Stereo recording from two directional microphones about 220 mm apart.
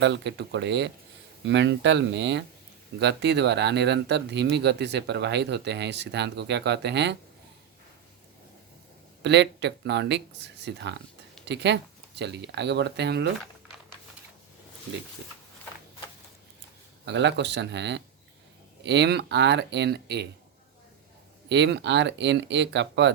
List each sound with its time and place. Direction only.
0.0 s speech: 50° right (ahead or behind)
9.2 s speech: 50° right (ahead or behind)
17.1 s speech: 50° right (ahead or behind)
21.5 s speech: 50° right (ahead or behind)